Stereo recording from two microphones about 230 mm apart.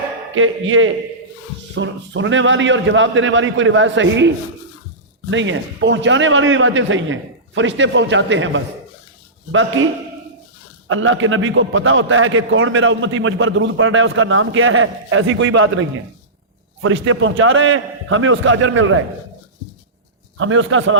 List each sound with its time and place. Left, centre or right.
0.3 s a man's voice: right
5.3 s a man's voice: right
10.8 s a man's voice: right
20.4 s a man's voice: right